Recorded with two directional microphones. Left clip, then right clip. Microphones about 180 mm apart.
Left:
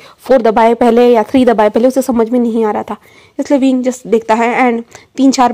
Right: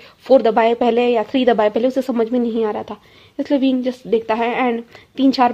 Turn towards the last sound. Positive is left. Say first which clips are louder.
# left 5 dB
turn(degrees=25)  # may be behind; listen again after turning